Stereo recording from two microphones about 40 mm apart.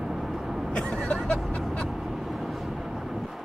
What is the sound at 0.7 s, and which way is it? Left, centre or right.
Vehicle, left.